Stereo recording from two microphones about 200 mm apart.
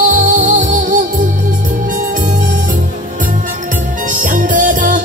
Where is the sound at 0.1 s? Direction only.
40° right (ahead or behind).